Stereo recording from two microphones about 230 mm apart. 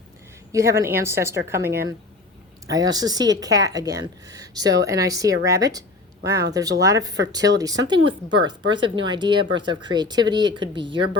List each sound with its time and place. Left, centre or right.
0.5 s a woman's voice: centre